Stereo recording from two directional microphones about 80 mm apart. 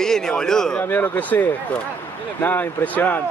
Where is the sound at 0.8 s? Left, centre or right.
Left.